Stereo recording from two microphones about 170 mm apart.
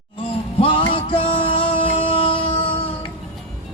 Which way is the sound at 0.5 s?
30° left (ahead or behind).